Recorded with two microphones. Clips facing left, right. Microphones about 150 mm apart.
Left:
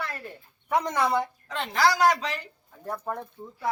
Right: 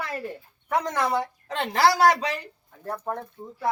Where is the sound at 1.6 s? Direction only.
65° right (ahead or behind).